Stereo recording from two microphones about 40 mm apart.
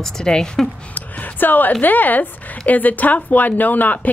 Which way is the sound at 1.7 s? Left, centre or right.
Left.